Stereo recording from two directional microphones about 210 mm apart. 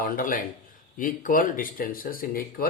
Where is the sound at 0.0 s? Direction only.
40° left (ahead or behind).